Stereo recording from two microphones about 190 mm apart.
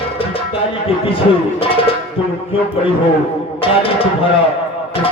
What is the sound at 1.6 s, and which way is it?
Music, 30° left (ahead or behind).